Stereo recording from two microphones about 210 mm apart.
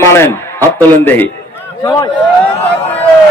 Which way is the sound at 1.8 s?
20° left (ahead or behind).